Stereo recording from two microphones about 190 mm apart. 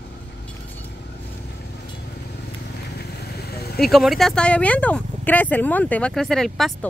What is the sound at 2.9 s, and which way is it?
Vehicle, 55° left (ahead or behind).